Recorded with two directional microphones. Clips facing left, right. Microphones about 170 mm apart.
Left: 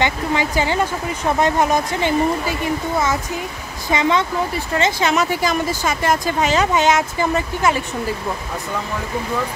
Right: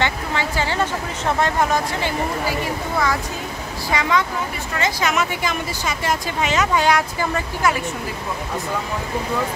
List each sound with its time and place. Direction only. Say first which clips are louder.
0.0 s speech: left 3 dB; 15° left (ahead or behind)
3.9 s speech: left 3 dB; 25° left (ahead or behind); by 6.5 s 45° left (ahead or behind)
6.5 s speech: left 1 dB; 25° left (ahead or behind)